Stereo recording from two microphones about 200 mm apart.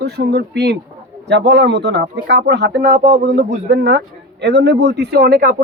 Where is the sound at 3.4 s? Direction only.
50° right (ahead or behind).